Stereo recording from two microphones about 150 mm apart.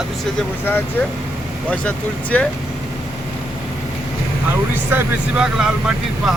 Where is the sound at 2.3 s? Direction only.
10° left (ahead or behind).